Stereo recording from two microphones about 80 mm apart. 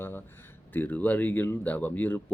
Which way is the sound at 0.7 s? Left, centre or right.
Left.